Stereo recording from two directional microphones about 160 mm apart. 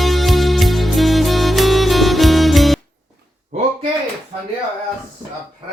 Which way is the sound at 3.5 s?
50° right (ahead or behind).